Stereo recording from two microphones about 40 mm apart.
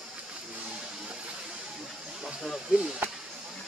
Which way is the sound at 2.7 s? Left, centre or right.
Centre.